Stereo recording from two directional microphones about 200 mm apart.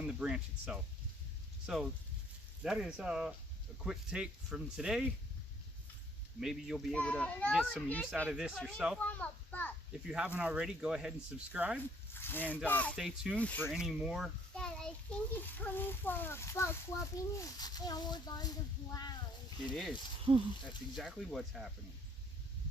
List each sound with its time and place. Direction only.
0.0 s speech: 5° right (ahead or behind)
6.4 s a child's voice: centre (ahead or behind)
10.1 s speech: 5° right (ahead or behind)
12.1 s a sound: 10° left (ahead or behind)
12.6 s a child's voice: 10° left (ahead or behind)
19.7 s speech: centre (ahead or behind)
20.3 s speech: 20° right (ahead or behind)
20.9 s speech: centre (ahead or behind)